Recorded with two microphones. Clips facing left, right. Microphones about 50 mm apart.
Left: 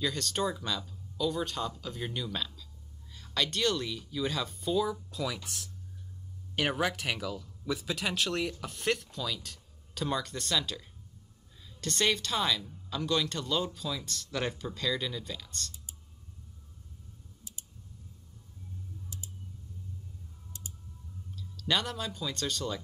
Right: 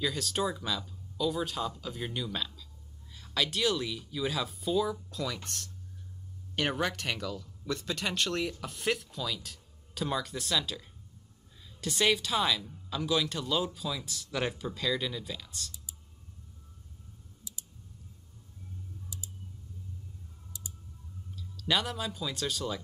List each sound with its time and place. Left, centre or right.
0.0 s speech: centre
21.4 s speech: centre